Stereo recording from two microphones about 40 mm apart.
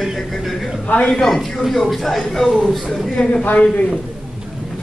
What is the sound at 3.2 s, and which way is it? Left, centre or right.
Speech, left.